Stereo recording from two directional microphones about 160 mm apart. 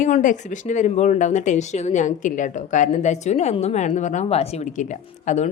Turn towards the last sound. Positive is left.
turn(degrees=45)  # may be behind; listen again after turning